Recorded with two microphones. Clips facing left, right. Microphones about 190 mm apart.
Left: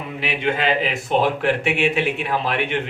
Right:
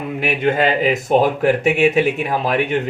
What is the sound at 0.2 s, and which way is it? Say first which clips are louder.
A man's voice: right 5 dB; 45° right (ahead or behind).